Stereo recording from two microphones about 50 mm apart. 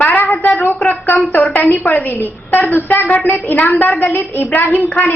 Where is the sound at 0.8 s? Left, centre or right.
Left.